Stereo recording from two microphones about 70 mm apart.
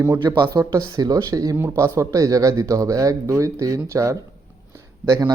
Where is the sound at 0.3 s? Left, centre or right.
Right.